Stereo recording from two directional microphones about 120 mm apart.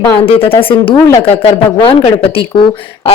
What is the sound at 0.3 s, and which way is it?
Speech, 50° left (ahead or behind).